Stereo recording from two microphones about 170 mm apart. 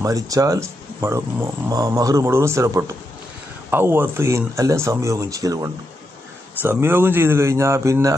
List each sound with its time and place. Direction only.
0.0 s speech: 20° right (ahead or behind)